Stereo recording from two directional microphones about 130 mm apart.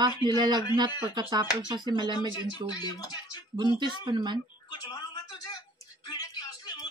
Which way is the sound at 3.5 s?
35° right (ahead or behind).